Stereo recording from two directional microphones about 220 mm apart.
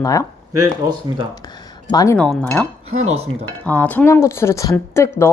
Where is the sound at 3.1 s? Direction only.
30° right (ahead or behind).